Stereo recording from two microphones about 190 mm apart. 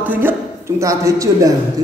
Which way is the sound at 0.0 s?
10° right (ahead or behind).